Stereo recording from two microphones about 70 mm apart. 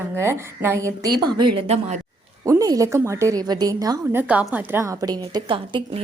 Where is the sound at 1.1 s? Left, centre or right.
Right.